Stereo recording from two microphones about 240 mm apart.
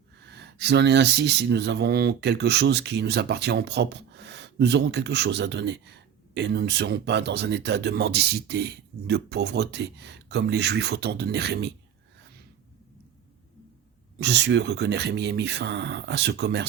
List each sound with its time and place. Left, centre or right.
0.2 s speech: right
14.2 s speech: right